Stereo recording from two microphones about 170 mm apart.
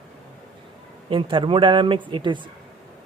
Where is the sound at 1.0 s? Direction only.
30° right (ahead or behind).